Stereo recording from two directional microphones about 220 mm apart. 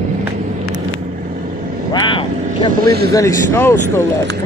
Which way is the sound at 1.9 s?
20° left (ahead or behind).